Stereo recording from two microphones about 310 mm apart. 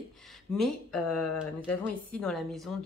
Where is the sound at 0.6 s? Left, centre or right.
Centre.